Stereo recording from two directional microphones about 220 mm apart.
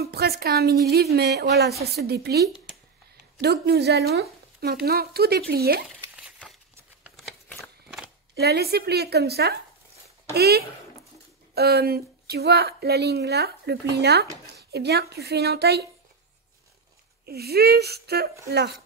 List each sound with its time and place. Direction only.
0.0 s a woman's voice: 45° right (ahead or behind)
6.1 s crumpling: 5° right (ahead or behind)
7.0 s shuffling cards: centre (ahead or behind)
8.4 s speech: 45° right (ahead or behind)
17.3 s speech: 45° right (ahead or behind)